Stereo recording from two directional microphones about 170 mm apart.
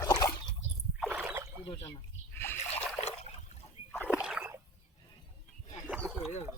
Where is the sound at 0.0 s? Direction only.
20° left (ahead or behind).